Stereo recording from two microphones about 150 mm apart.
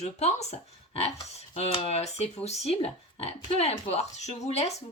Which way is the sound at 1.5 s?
40° left (ahead or behind).